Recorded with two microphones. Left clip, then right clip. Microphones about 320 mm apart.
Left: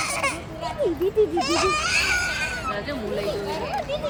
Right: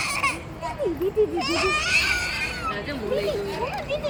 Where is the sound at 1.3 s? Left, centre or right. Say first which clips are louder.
Left 1 dB; left.